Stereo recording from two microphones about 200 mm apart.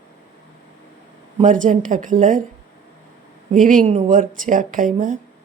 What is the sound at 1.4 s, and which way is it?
A woman's voice, 40° right (ahead or behind).